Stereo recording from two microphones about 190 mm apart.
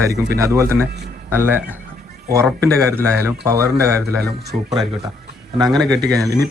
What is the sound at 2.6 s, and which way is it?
Speech, 15° right (ahead or behind).